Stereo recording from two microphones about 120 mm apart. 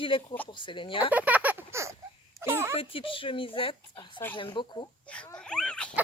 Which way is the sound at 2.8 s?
50° left (ahead or behind).